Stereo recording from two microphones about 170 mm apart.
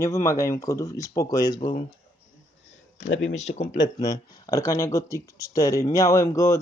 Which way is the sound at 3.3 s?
40° left (ahead or behind).